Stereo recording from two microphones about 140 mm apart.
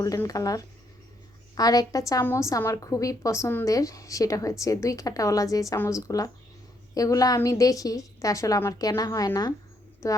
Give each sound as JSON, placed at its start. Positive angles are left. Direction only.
{"t": 0.0, "sound": "a woman's voice", "side_deg": 25}